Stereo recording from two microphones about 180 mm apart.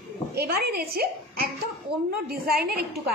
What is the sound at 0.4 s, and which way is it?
A woman's voice, 60° right (ahead or behind).